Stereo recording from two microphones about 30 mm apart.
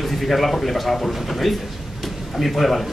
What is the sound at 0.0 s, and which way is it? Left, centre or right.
Speech, centre.